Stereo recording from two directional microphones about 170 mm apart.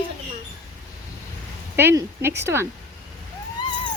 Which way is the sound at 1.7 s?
15° right (ahead or behind).